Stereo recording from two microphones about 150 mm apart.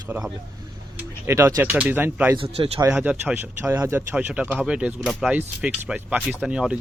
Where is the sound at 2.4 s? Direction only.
40° right (ahead or behind).